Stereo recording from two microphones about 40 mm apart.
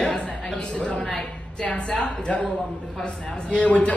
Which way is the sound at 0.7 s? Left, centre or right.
Left.